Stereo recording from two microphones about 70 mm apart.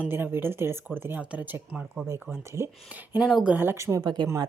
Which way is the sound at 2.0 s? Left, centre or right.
Right.